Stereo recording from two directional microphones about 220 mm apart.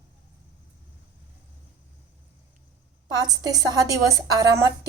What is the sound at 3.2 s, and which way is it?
A woman's voice, 15° right (ahead or behind).